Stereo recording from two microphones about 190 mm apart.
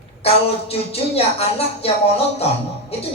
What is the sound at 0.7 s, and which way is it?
Speech, 30° left (ahead or behind).